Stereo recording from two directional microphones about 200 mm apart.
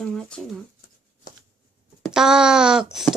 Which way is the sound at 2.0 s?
5° right (ahead or behind).